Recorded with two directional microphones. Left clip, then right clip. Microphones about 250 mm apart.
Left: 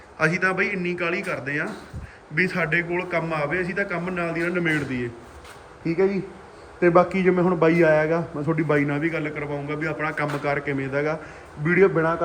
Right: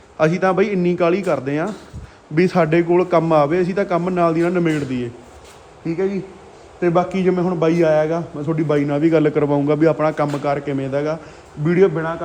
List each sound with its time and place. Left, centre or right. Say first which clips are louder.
0.2 s a man's voice: right 5 dB; centre
5.8 s a man's voice: right 1 dB; centre
9.1 s a man's voice: right 12 dB; right
9.6 s a man's voice: right 11 dB; centre